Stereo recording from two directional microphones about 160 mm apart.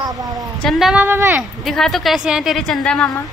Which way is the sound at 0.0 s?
20° right (ahead or behind).